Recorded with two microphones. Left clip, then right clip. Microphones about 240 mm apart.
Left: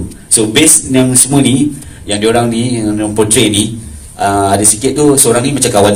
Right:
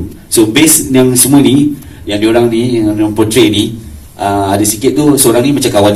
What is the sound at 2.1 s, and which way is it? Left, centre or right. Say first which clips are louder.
A man's voice: right 2 dB; left.